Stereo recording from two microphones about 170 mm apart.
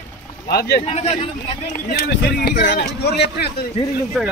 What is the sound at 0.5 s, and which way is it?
Speech, 70° left (ahead or behind).